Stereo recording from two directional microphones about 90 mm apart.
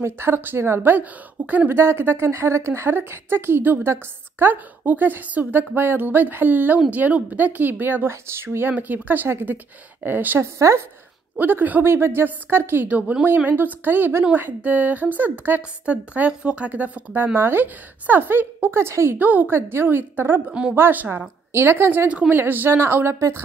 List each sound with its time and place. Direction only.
0.0 s a woman's voice: 25° right (ahead or behind)